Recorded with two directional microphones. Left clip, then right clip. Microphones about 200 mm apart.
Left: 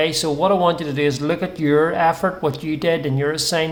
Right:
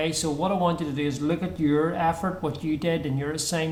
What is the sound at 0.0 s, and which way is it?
Speech, 20° left (ahead or behind).